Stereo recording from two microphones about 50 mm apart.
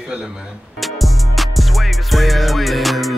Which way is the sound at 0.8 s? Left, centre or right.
Centre.